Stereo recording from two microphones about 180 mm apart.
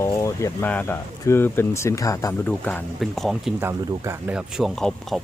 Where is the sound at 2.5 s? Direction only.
5° left (ahead or behind).